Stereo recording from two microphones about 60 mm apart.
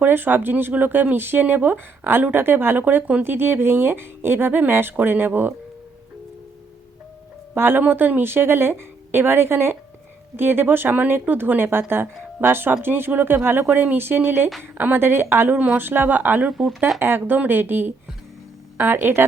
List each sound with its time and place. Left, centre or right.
0.0 s speech: right
7.5 s speech: right
15.5 s a woman's voice: right
15.8 s speech: right
16.5 s speech: centre
17.0 s speech: right